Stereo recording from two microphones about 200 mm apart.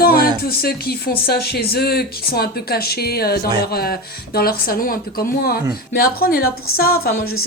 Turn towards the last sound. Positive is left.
turn(degrees=50)  # may be behind; listen again after turning